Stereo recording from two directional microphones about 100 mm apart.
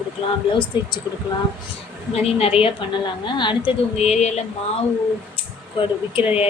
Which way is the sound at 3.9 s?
90° left.